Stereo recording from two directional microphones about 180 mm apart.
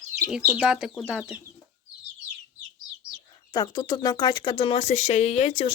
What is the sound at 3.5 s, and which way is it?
Speech, 20° left (ahead or behind).